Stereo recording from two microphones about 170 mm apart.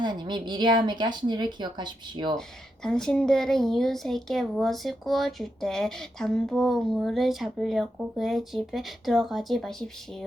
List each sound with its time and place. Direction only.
0.0 s speech: 25° right (ahead or behind)
2.8 s speech: 5° left (ahead or behind)